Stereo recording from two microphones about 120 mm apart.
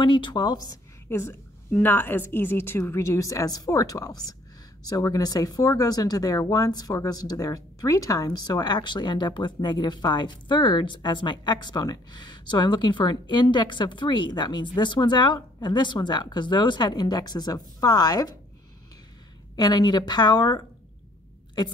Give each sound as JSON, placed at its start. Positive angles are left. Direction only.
{"t": 0.0, "sound": "speech", "side_deg": 40}
{"t": 1.0, "sound": "a woman's voice", "side_deg": 20}
{"t": 19.5, "sound": "speech", "side_deg": 35}